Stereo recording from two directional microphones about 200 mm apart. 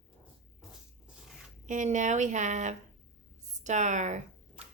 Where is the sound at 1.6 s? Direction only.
35° right (ahead or behind).